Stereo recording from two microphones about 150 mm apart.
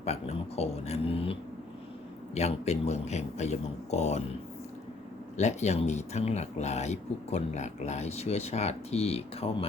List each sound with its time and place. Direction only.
0.0 s speech: 45° left (ahead or behind)
5.4 s speech: 50° left (ahead or behind)